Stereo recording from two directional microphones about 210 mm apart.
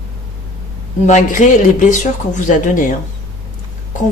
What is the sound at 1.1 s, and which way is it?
A man's voice, 35° left (ahead or behind).